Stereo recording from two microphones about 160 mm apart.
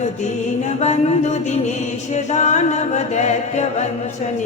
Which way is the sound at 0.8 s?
45° left (ahead or behind).